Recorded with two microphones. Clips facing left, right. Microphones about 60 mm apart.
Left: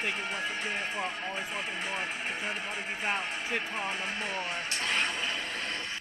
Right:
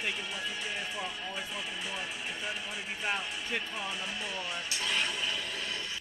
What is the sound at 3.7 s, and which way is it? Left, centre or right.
Music, left.